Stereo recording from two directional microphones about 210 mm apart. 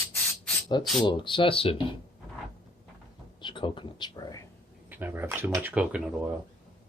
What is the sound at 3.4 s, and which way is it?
Speech, 20° left (ahead or behind).